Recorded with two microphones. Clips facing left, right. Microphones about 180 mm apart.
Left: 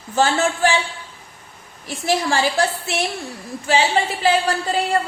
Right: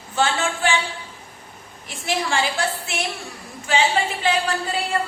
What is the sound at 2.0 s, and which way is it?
Speech, 40° left (ahead or behind).